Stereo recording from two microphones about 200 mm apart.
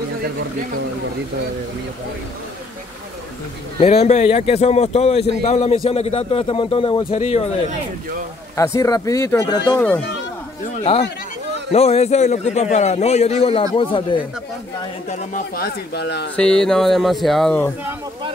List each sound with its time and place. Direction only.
3.8 s a man's voice: 35° left (ahead or behind)
8.5 s speech: 15° left (ahead or behind)
9.8 s speech: 5° left (ahead or behind)
10.8 s a man's voice: 30° left (ahead or behind)
15.0 s speech: 45° left (ahead or behind)
16.3 s speech: 5° left (ahead or behind)